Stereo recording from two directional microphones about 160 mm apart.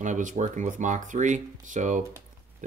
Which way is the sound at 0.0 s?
50° right (ahead or behind).